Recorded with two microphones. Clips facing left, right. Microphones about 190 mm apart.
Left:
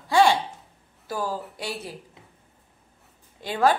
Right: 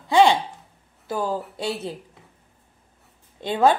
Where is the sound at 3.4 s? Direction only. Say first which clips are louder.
Right 3 dB; 25° right (ahead or behind).